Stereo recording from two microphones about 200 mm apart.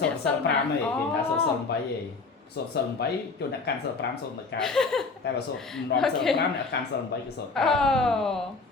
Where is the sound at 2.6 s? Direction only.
55° left (ahead or behind).